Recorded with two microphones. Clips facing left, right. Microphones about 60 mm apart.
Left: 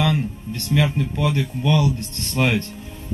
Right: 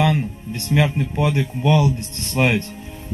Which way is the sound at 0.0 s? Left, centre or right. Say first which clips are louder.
Right 2 dB; centre.